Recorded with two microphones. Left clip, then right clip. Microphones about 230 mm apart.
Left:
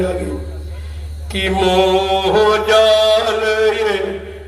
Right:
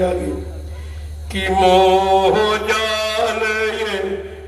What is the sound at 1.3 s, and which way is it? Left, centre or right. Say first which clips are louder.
Chant: right 2 dB; centre.